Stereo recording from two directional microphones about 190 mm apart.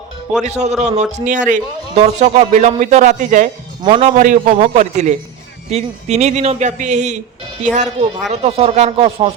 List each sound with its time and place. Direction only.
0.4 s a man's voice: 35° right (ahead or behind)